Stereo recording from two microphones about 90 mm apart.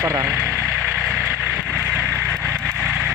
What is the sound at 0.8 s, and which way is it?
Vehicle, centre (ahead or behind).